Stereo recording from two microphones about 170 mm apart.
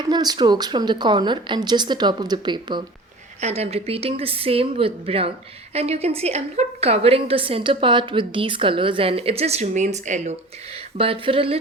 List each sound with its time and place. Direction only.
0.1 s a woman's voice: 25° right (ahead or behind)
3.4 s a woman's voice: 40° right (ahead or behind)